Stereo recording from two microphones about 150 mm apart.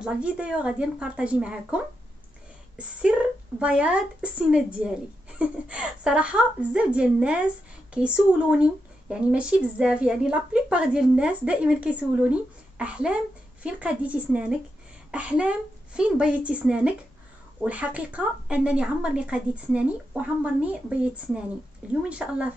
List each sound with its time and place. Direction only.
0.0 s a woman's voice: 5° right (ahead or behind)
3.0 s a woman's voice: 5° right (ahead or behind)